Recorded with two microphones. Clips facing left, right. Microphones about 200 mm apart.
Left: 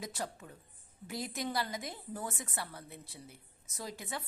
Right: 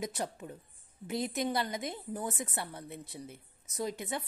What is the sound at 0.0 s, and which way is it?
A woman's voice, 20° right (ahead or behind).